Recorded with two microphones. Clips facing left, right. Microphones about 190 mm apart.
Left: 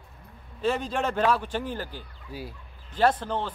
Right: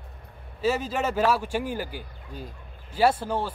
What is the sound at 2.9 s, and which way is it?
Speech, 10° right (ahead or behind).